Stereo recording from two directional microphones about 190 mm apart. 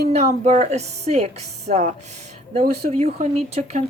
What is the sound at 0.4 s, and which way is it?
Speech, 35° right (ahead or behind).